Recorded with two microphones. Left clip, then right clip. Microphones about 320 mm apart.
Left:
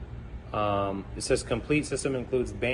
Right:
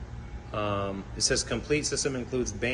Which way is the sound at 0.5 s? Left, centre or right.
Centre.